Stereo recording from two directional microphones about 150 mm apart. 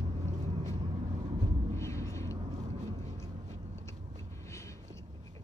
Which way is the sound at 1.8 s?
20° left (ahead or behind).